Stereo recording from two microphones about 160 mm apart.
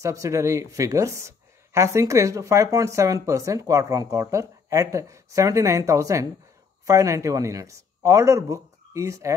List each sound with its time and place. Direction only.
0.0 s speech: 20° right (ahead or behind)